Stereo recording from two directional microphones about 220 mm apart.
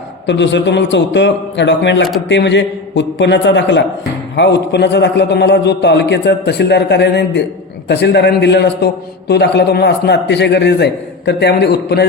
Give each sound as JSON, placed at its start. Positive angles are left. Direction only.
{"t": 0.3, "sound": "a man's voice", "side_deg": 55}